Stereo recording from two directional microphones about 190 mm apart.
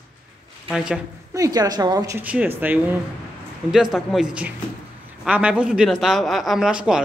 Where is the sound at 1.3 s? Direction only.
20° right (ahead or behind).